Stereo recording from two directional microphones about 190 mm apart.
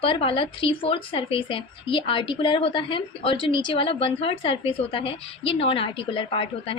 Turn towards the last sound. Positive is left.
turn(degrees=30)  # may be behind; listen again after turning